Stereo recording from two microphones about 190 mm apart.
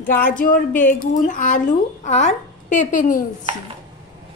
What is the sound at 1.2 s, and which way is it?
A woman's voice, 45° left (ahead or behind).